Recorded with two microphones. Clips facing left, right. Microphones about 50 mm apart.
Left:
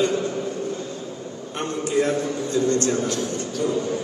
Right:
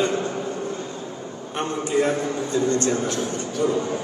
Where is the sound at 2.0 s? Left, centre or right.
Right.